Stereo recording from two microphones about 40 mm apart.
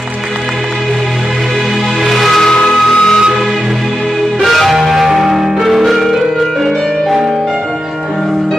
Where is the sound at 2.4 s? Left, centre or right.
Centre.